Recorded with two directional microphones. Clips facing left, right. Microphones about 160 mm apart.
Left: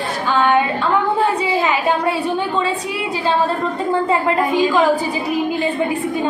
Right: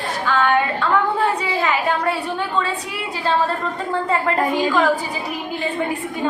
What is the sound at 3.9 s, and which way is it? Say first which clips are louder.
Speech: left 3 dB; 15° left (ahead or behind).